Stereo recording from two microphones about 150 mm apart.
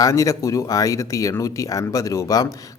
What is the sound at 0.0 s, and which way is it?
Speech, 20° left (ahead or behind).